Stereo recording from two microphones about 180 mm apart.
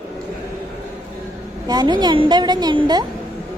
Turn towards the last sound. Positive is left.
turn(degrees=-25)  # may be behind; listen again after turning